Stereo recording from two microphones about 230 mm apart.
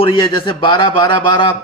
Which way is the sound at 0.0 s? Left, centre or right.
Centre.